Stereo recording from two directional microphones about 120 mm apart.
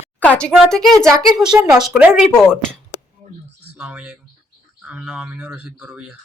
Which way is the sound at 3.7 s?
5° right (ahead or behind).